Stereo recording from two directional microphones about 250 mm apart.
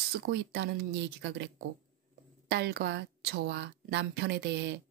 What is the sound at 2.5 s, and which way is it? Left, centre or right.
A woman's voice, right.